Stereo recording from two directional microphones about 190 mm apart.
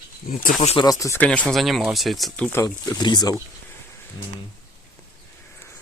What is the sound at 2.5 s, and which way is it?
Speech, 20° left (ahead or behind).